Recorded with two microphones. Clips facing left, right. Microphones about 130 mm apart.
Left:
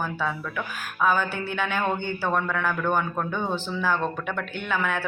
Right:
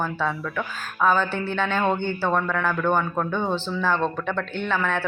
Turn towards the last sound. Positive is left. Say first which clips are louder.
# right 2 dB
turn(degrees=10)  # may be behind; listen again after turning